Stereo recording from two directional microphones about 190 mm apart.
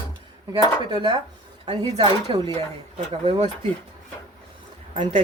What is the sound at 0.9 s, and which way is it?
Speech, 25° right (ahead or behind).